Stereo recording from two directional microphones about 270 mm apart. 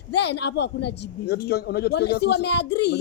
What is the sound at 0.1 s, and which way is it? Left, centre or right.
Speech, left.